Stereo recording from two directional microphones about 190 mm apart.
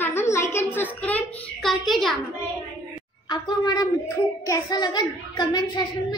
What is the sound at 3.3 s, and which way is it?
A child's voice, 20° left (ahead or behind).